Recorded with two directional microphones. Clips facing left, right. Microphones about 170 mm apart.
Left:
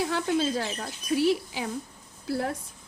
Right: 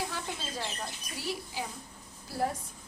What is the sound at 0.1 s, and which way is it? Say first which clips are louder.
A woman's voice: left 12 dB; 70° left (ahead or behind).